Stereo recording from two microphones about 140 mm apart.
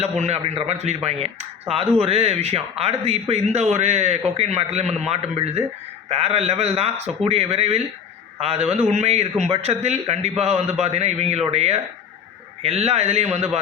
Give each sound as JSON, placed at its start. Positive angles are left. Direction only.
{"t": 0.0, "sound": "speech", "side_deg": -50}